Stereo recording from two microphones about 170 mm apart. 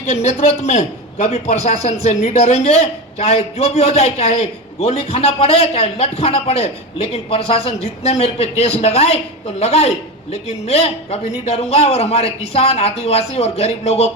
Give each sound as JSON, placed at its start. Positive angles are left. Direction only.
{"t": 0.1, "sound": "a man's voice", "side_deg": 40}